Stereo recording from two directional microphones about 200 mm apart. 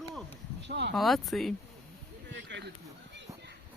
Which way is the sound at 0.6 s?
60° right (ahead or behind).